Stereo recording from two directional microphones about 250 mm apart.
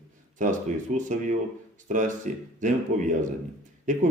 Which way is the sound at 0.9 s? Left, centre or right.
Right.